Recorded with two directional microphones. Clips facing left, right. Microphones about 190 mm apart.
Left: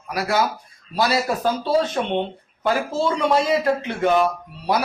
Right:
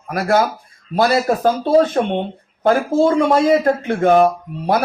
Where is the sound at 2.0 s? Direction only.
50° right (ahead or behind).